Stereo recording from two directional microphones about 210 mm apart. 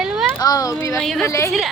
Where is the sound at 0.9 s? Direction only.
Centre (ahead or behind).